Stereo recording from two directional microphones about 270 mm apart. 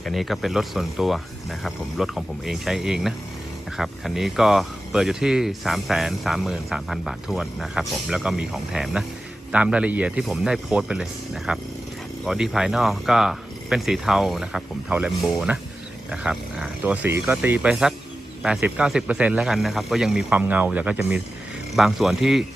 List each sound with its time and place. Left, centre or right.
0.0 s speech: centre